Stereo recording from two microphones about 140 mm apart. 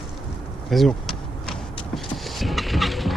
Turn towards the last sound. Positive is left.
turn(degrees=0)  # may be behind; listen again after turning